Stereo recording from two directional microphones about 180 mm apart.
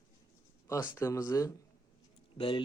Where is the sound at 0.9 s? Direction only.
15° left (ahead or behind).